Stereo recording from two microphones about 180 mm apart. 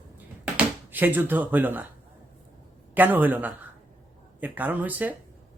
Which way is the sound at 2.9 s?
10° right (ahead or behind).